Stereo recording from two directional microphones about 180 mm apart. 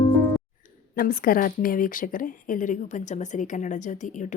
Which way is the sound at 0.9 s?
55° left (ahead or behind).